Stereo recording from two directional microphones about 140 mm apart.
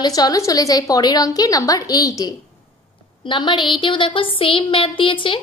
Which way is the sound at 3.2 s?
35° left (ahead or behind).